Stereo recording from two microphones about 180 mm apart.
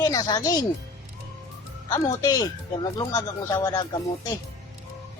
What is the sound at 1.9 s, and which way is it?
Speech, 20° left (ahead or behind).